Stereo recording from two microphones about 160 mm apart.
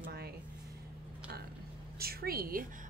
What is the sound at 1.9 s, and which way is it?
Speech, 70° right (ahead or behind).